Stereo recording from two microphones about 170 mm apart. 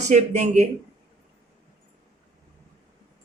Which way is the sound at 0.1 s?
40° right (ahead or behind).